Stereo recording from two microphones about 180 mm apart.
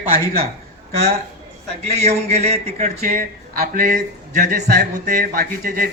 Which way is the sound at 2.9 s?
55° right (ahead or behind).